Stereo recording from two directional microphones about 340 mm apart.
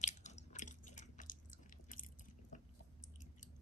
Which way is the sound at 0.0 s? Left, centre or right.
Left.